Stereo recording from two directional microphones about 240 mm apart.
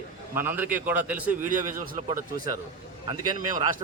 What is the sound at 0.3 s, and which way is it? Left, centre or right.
A man's voice, centre.